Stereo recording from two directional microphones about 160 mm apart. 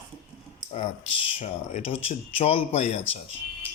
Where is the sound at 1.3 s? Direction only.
45° left (ahead or behind).